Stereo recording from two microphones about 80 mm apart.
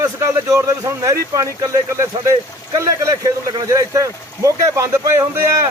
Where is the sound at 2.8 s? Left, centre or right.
Right.